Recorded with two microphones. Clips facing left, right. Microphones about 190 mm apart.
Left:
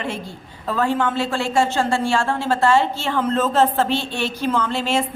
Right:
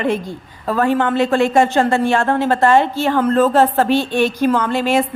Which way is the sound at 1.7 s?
60° right (ahead or behind).